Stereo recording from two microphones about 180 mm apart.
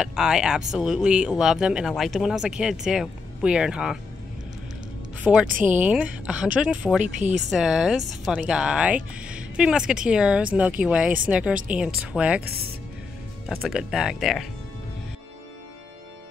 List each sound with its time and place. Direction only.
0.0 s speech: 5° right (ahead or behind)
5.2 s speech: 5° right (ahead or behind)
5.5 s speech: 45° right (ahead or behind)
5.8 s speech: 5° right (ahead or behind)
7.2 s a woman's voice: 40° right (ahead or behind)
7.4 s speech: centre (ahead or behind)
13.6 s speech: centre (ahead or behind)